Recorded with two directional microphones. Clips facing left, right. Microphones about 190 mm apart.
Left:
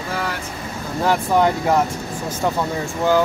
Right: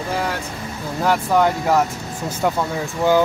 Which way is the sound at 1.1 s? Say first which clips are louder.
Even; centre (ahead or behind).